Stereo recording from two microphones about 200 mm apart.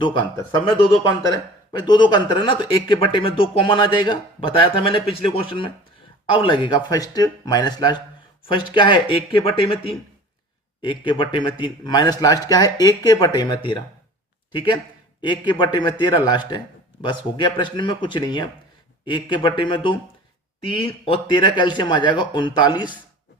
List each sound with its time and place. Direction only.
0.0 s speech: 20° left (ahead or behind)